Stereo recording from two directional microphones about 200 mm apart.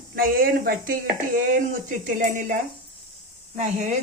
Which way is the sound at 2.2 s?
40° right (ahead or behind).